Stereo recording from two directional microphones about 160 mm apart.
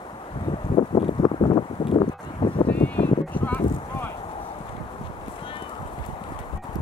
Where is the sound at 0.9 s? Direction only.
35° left (ahead or behind).